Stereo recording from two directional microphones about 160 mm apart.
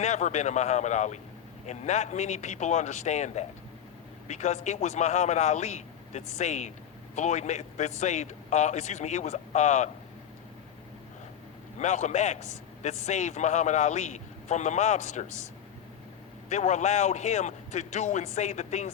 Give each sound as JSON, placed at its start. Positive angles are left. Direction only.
{"t": 0.0, "sound": "a man's voice", "side_deg": 45}
{"t": 11.8, "sound": "a man's voice", "side_deg": 45}
{"t": 16.5, "sound": "a man's voice", "side_deg": 45}